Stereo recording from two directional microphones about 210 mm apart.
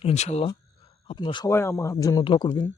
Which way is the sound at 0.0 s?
30° left (ahead or behind).